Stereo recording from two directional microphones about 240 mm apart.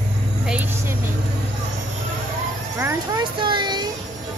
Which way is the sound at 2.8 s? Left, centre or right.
Centre.